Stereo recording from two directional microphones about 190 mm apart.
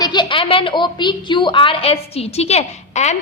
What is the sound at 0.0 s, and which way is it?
A woman's voice, 25° left (ahead or behind).